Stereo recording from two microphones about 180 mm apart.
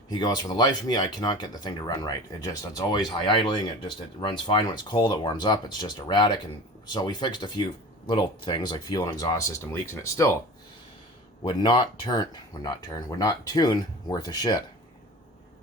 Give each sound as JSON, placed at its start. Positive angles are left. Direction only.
{"t": 0.1, "sound": "speech", "side_deg": 25}
{"t": 11.4, "sound": "speech", "side_deg": 25}